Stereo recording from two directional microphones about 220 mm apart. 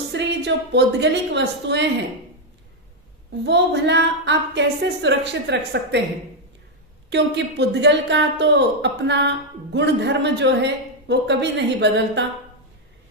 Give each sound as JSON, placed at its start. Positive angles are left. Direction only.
{"t": 0.1, "sound": "a woman's voice", "side_deg": -55}
{"t": 3.4, "sound": "a woman's voice", "side_deg": -50}
{"t": 7.1, "sound": "a woman's voice", "side_deg": -50}